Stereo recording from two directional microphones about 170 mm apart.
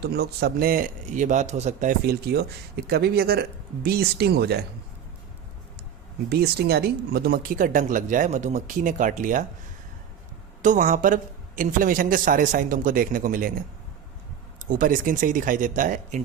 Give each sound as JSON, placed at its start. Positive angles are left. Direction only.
{"t": 0.0, "sound": "a man's voice", "side_deg": -70}
{"t": 2.0, "sound": "speech", "side_deg": -70}
{"t": 6.2, "sound": "speech", "side_deg": -70}
{"t": 10.6, "sound": "speech", "side_deg": -50}
{"t": 14.7, "sound": "speech", "side_deg": -55}